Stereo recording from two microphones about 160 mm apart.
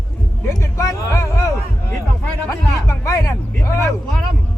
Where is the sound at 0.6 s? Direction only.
15° left (ahead or behind).